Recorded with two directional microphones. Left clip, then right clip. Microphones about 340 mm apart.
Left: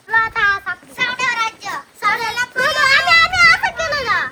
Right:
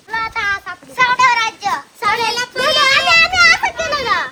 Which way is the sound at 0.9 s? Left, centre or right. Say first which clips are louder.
Right 7 dB; right.